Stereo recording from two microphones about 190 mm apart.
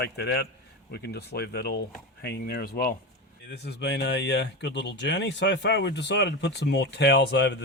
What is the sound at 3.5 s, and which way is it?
Speech, 60° left (ahead or behind).